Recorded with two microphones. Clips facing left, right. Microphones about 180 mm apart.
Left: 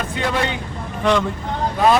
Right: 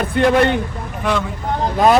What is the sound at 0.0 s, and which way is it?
Speech, 55° right (ahead or behind).